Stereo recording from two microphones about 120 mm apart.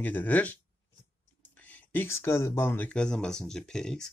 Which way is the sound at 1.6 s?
15° left (ahead or behind).